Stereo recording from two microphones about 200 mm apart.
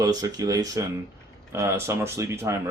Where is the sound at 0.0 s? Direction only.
20° right (ahead or behind).